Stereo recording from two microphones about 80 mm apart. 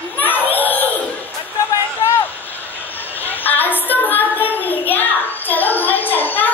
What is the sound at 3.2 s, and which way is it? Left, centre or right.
Child singing, left.